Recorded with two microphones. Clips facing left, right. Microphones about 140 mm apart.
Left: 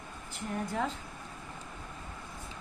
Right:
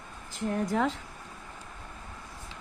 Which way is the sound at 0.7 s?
90° right.